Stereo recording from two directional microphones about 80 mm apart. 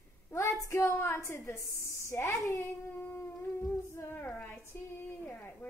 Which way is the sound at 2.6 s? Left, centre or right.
Left.